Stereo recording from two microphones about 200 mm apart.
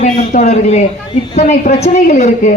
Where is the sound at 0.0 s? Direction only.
35° left (ahead or behind).